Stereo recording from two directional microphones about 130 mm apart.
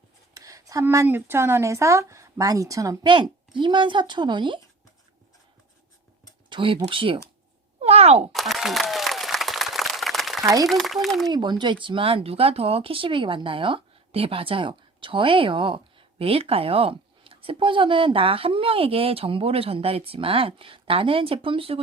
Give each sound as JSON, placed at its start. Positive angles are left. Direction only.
{"t": 0.3, "sound": "speech", "side_deg": -25}
{"t": 3.0, "sound": "speech", "side_deg": -40}
{"t": 6.5, "sound": "speech", "side_deg": -40}
{"t": 7.8, "sound": "thunk", "side_deg": -50}
{"t": 8.3, "sound": "applause", "side_deg": 0}
{"t": 10.4, "sound": "speech", "side_deg": -25}
{"t": 10.7, "sound": "speech", "side_deg": 0}
{"t": 11.3, "sound": "speech", "side_deg": -35}